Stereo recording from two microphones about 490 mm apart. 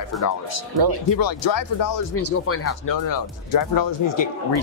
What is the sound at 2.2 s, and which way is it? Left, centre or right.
Speech, left.